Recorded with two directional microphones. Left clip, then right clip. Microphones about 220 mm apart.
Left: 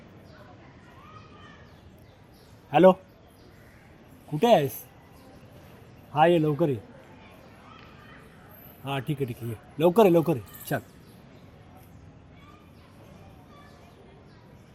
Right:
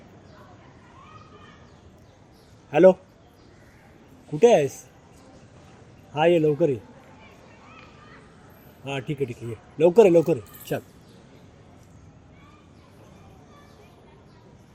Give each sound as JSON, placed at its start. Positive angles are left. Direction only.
{"t": 2.6, "sound": "a man's voice", "side_deg": 30}
{"t": 4.4, "sound": "speech", "side_deg": 30}
{"t": 6.1, "sound": "speech", "side_deg": 35}
{"t": 8.8, "sound": "speech", "side_deg": 35}